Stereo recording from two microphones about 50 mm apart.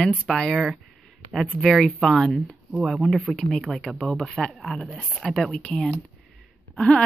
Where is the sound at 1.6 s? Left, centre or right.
Centre.